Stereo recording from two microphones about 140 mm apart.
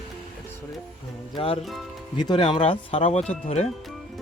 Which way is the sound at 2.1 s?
35° left (ahead or behind).